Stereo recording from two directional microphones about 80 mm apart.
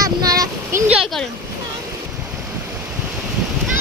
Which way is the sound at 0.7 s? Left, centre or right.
Right.